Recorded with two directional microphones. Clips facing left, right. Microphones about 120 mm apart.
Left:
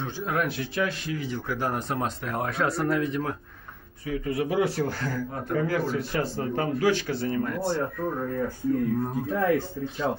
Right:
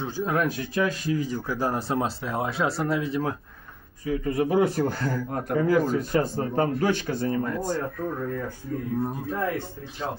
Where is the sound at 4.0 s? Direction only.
35° right (ahead or behind).